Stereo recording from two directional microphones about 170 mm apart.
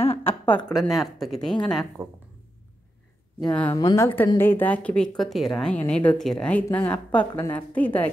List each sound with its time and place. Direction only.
0.2 s a woman's voice: 10° left (ahead or behind)
0.7 s speech: centre (ahead or behind)
3.7 s speech: 20° left (ahead or behind)